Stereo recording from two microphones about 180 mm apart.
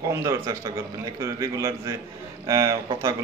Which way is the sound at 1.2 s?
15° right (ahead or behind).